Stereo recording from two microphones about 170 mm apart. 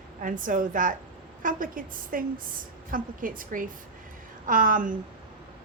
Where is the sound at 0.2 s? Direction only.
50° right (ahead or behind).